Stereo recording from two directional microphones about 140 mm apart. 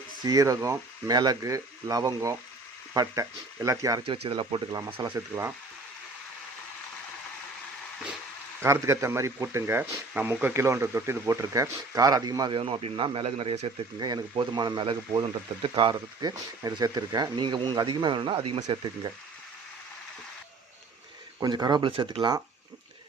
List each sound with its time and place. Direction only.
0.3 s speech: 25° right (ahead or behind)
4.0 s speech: 40° right (ahead or behind)
8.6 s speech: 20° right (ahead or behind); by 13.7 s 45° right (ahead or behind)
14.0 s speech: 30° right (ahead or behind)
21.4 s speech: 30° right (ahead or behind)